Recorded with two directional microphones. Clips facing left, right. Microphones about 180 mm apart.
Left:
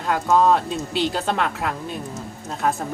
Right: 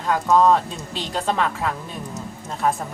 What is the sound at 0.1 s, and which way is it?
Speech, 5° left (ahead or behind).